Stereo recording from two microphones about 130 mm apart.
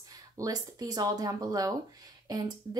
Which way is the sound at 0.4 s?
30° right (ahead or behind).